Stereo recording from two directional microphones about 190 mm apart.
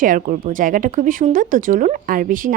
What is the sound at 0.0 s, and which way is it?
Speech, 40° right (ahead or behind).